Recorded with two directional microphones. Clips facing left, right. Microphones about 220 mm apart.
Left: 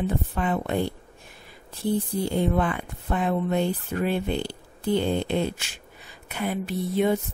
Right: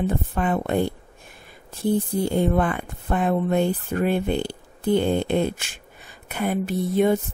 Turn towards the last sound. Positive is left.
turn(degrees=-50)  # may be behind; listen again after turning